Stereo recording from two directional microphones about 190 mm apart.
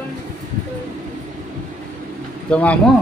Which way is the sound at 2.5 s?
5° left (ahead or behind).